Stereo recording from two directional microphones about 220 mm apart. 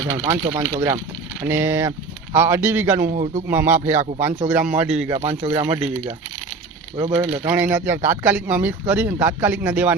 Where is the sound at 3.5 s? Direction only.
10° right (ahead or behind).